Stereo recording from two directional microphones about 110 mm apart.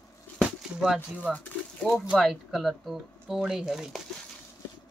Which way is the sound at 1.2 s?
15° left (ahead or behind).